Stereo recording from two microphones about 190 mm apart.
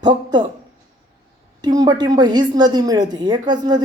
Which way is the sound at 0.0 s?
25° right (ahead or behind).